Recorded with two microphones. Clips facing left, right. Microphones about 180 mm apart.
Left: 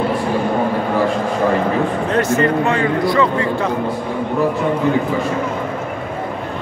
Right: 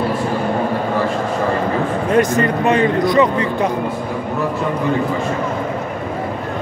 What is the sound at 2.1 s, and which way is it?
A man's voice, 15° right (ahead or behind).